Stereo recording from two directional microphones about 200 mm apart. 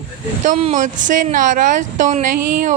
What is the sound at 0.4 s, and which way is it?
Speech, 40° right (ahead or behind).